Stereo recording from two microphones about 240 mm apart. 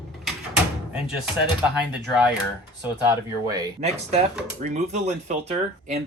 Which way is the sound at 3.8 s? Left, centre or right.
Right.